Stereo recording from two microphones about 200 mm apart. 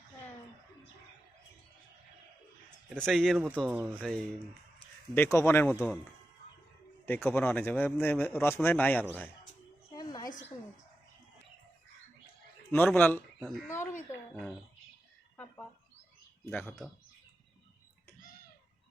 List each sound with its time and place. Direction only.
2.9 s speech: 5° left (ahead or behind)
7.0 s speech: 10° left (ahead or behind)
9.9 s a sound: 20° left (ahead or behind)
12.7 s speech: 10° left (ahead or behind)
16.5 s speech: 5° left (ahead or behind)